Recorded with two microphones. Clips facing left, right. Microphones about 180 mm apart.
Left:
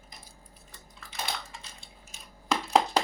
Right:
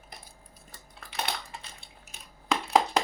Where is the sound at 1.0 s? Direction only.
65° right (ahead or behind).